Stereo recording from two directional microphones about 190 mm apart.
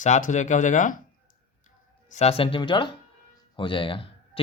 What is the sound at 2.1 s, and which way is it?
Speech, 35° left (ahead or behind).